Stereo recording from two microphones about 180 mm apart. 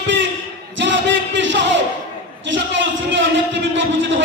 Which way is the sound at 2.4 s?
90° right.